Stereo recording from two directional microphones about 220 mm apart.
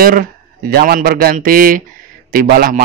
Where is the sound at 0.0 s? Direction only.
40° right (ahead or behind).